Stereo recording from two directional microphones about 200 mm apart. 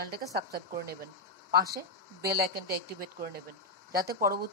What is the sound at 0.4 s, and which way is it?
Speech, 50° right (ahead or behind).